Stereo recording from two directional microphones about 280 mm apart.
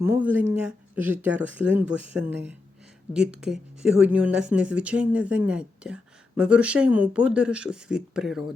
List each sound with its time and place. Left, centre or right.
0.0 s speech: centre
3.1 s speech: centre